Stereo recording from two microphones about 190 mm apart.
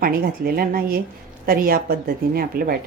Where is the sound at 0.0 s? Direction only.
50° right (ahead or behind).